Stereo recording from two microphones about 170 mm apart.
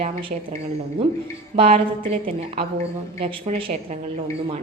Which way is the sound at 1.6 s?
35° right (ahead or behind).